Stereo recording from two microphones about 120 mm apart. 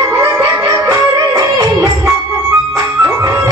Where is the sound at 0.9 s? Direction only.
30° right (ahead or behind).